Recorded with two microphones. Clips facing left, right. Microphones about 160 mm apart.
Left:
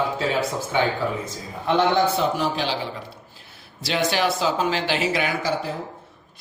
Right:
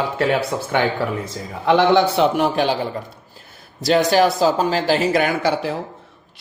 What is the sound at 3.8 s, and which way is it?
Speech, 40° right (ahead or behind).